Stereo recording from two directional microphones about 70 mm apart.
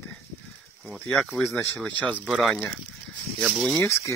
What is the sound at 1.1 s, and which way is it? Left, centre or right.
Speech, centre.